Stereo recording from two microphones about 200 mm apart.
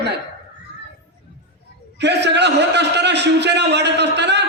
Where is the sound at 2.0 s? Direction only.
60° right (ahead or behind).